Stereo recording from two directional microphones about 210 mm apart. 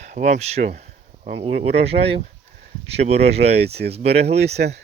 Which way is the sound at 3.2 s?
30° right (ahead or behind).